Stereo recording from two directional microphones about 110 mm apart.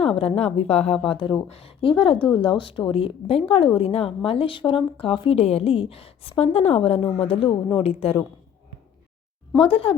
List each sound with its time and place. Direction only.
0.0 s a woman's voice: 60° left (ahead or behind)
1.0 s speech: 50° left (ahead or behind)
1.4 s a woman's voice: 60° left (ahead or behind)
5.4 s a woman's voice: 65° left (ahead or behind)
9.6 s a woman's voice: 55° left (ahead or behind)